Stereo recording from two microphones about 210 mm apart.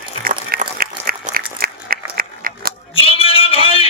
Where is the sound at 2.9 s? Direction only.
25° left (ahead or behind).